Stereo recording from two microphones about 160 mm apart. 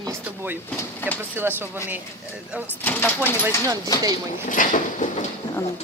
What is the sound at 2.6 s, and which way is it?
Speech, 10° left (ahead or behind).